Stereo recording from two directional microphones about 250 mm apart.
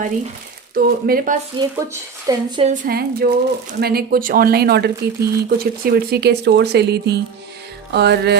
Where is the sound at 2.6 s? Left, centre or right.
Right.